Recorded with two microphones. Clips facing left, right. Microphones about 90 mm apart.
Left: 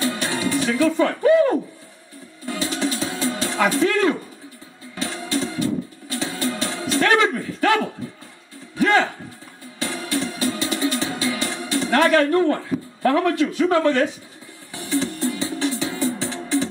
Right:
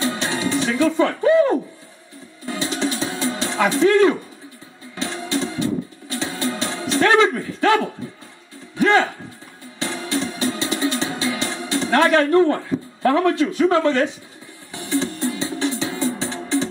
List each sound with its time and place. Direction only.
0.0 s music: 25° right (ahead or behind)
13.0 s a man's voice: 25° right (ahead or behind)
14.7 s music: 25° right (ahead or behind)